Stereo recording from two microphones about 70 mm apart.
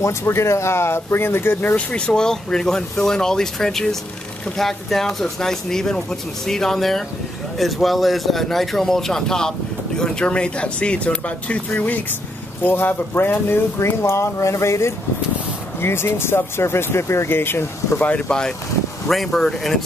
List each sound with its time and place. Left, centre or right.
0.2 s speech: left
19.0 s speech: centre